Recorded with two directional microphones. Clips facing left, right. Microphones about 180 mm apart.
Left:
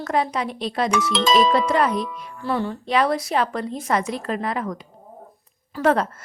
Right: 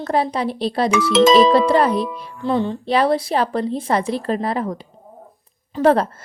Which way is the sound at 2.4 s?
20° right (ahead or behind).